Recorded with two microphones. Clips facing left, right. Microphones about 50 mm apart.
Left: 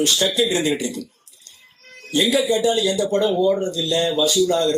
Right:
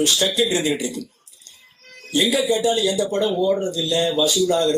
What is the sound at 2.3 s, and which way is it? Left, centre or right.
Speech, left.